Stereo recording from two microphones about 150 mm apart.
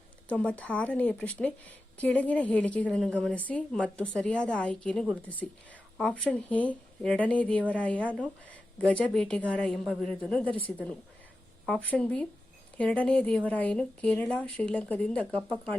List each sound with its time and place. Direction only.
0.3 s a woman's voice: 10° left (ahead or behind)